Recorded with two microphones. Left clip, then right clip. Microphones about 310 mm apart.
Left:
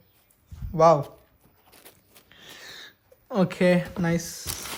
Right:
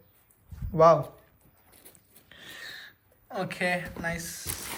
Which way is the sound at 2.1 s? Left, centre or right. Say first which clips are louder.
Right 2 dB; centre.